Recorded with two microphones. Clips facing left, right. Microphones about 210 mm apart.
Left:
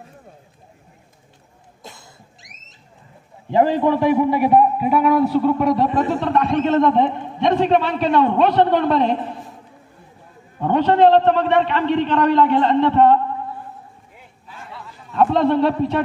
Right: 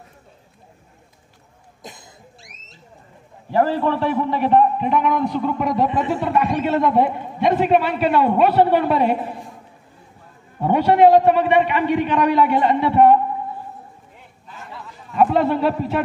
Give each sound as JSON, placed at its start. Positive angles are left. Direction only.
{"t": 1.8, "sound": "cough", "side_deg": -15}
{"t": 3.5, "sound": "a man's voice", "side_deg": 15}
{"t": 10.6, "sound": "a man's voice", "side_deg": -10}
{"t": 14.5, "sound": "a sound", "side_deg": 0}